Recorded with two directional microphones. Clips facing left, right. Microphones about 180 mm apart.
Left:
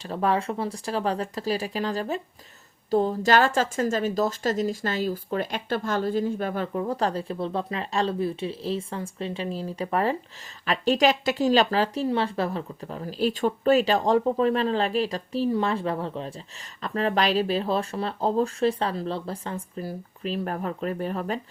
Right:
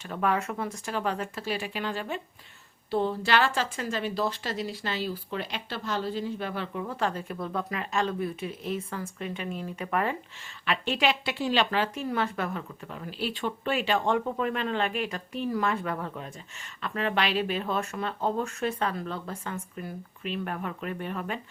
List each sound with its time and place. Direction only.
0.0 s speech: 35° left (ahead or behind)